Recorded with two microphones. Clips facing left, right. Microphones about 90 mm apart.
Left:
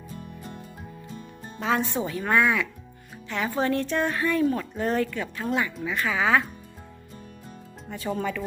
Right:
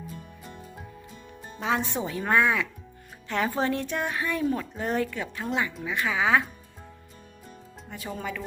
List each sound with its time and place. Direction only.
1.5 s speech: 15° right (ahead or behind)
3.2 s speech: 40° right (ahead or behind)
3.6 s speech: 25° right (ahead or behind)
3.8 s speech: 10° right (ahead or behind)
7.9 s speech: 5° right (ahead or behind)